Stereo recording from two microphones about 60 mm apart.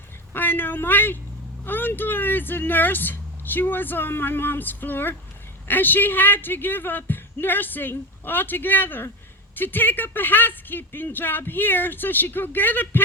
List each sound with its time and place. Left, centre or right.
0.3 s speech: left